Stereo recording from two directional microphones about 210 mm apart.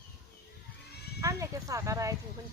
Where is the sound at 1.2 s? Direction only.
15° right (ahead or behind).